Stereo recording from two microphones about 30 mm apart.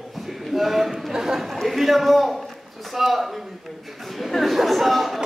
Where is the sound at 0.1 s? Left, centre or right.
Centre.